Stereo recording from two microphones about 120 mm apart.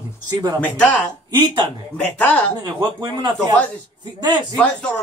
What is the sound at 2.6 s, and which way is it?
Speech, 35° right (ahead or behind).